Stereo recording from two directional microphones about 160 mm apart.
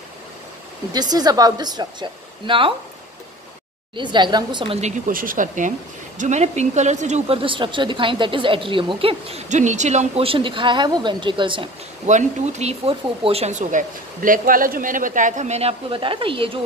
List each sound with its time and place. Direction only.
0.9 s a woman's voice: 25° right (ahead or behind)
3.9 s a woman's voice: 30° right (ahead or behind)
4.7 s a woman's voice: 50° right (ahead or behind)
9.5 s a woman's voice: 50° right (ahead or behind); by 11.7 s 30° right (ahead or behind)
12.1 s speech: 45° right (ahead or behind)